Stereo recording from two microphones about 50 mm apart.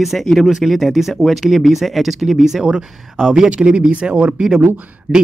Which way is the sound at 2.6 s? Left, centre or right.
Centre.